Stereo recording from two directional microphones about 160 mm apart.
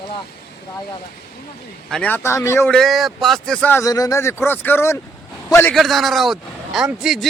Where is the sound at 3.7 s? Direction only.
20° left (ahead or behind).